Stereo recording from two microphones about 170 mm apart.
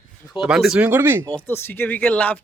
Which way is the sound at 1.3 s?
10° left (ahead or behind).